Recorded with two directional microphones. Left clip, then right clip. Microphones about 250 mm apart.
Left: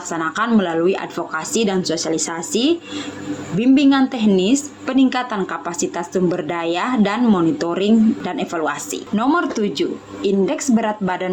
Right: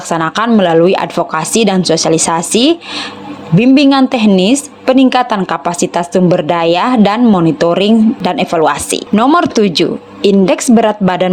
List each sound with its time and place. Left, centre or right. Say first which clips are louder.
0.1 s a woman's voice: right 7 dB; right